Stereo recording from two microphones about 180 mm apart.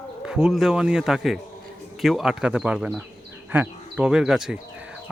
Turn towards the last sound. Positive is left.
turn(degrees=-5)  # may be behind; listen again after turning